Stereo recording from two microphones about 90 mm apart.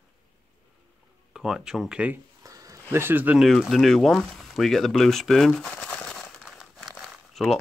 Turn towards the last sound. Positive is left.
turn(degrees=5)  # may be behind; listen again after turning